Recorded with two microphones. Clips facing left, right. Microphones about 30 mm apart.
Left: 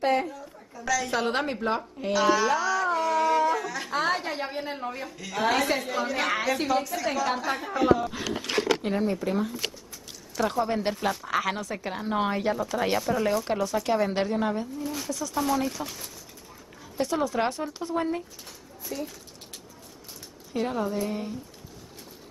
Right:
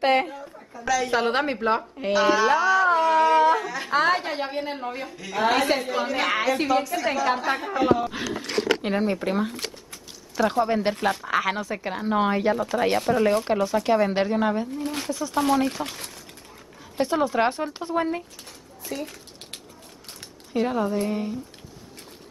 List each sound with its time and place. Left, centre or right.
0.0 s speech: right
0.3 s a sound: right
0.8 s a woman's voice: centre
3.6 s a sound: centre
3.9 s a woman's voice: centre
10.6 s a woman's voice: centre
14.7 s speech: right
15.0 s speech: right
17.0 s speech: right
17.9 s speech: centre
18.9 s speech: right
20.5 s a woman's voice: centre
20.8 s speech: right
21.1 s a woman's voice: centre